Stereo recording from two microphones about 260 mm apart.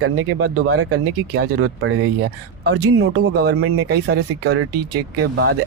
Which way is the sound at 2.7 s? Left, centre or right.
Right.